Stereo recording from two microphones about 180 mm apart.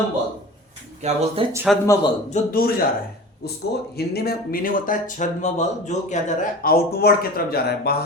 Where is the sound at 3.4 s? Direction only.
65° left (ahead or behind).